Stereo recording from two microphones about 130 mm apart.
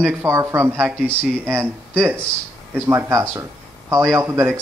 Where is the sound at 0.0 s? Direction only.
20° right (ahead or behind).